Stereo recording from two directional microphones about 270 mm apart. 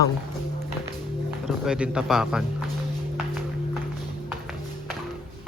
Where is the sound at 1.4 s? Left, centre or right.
Centre.